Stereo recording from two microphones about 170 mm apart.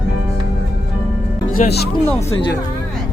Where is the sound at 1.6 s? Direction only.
45° left (ahead or behind).